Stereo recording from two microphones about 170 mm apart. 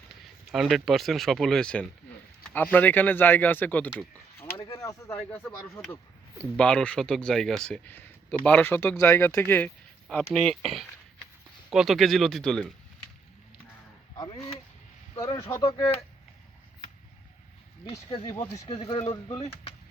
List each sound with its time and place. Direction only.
0.5 s speech: centre (ahead or behind)
11.7 s speech: centre (ahead or behind)
15.4 s speech: 15° left (ahead or behind)
17.9 s a man's voice: 30° left (ahead or behind)
19.1 s speech: 20° left (ahead or behind)